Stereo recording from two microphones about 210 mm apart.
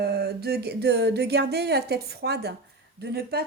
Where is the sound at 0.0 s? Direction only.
50° right (ahead or behind).